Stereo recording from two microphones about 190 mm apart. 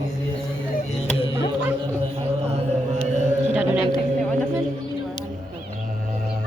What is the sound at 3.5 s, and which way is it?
Singing bowl, 5° right (ahead or behind).